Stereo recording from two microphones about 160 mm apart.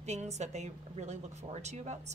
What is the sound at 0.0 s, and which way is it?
A woman's voice, 45° right (ahead or behind).